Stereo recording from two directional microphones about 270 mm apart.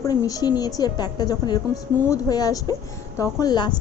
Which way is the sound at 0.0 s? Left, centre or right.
Centre.